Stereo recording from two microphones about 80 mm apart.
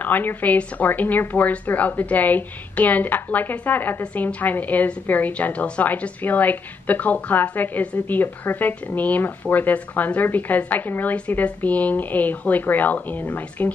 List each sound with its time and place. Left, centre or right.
0.0 s a woman's voice: left